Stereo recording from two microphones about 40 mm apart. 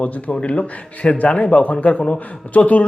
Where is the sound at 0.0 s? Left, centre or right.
Left.